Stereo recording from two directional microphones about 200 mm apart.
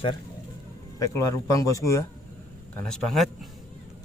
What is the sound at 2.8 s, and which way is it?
Speech, centre (ahead or behind).